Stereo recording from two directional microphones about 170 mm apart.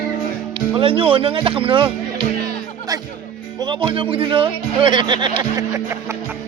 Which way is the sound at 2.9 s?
20° right (ahead or behind).